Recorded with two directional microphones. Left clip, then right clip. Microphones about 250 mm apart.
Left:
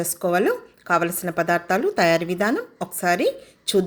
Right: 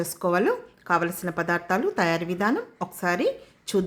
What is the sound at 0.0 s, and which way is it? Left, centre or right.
Speech, centre.